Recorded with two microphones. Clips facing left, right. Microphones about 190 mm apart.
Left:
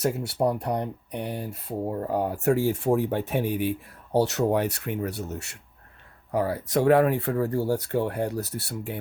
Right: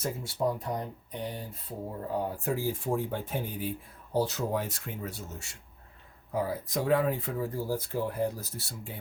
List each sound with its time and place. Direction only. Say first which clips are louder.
0.0 s speech: left 6 dB; 75° left (ahead or behind)